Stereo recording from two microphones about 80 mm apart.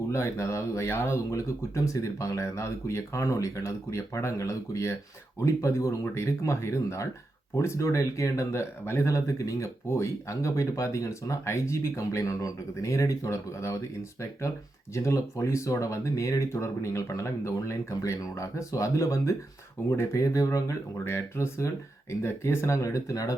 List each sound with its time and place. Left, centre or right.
0.1 s speech: left
21.0 s speech: left